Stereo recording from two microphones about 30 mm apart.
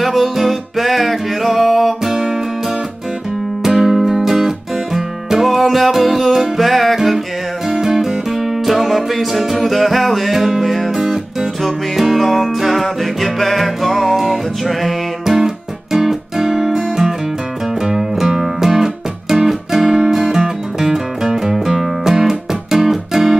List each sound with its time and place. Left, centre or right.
0.0 s music: centre
2.0 s music: right
3.6 s music: centre
7.7 s music: centre
8.6 s music: centre
10.3 s music: centre
15.2 s music: centre